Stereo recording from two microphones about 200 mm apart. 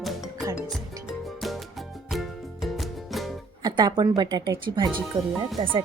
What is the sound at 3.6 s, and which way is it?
A woman's voice, 20° right (ahead or behind).